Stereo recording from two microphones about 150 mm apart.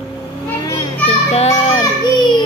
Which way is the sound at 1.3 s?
45° left (ahead or behind).